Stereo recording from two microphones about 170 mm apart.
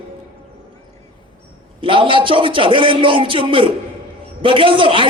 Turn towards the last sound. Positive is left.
turn(degrees=-30)  # may be behind; listen again after turning